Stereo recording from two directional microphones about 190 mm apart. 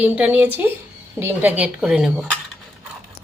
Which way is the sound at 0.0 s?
10° right (ahead or behind).